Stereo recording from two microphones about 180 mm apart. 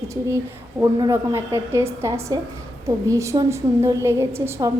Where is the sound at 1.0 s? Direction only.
15° right (ahead or behind).